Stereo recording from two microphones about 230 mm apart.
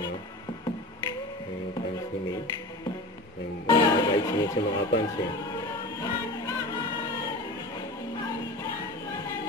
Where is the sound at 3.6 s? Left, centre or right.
Centre.